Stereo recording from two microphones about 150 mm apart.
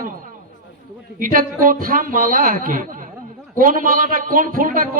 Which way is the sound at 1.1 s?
65° right (ahead or behind).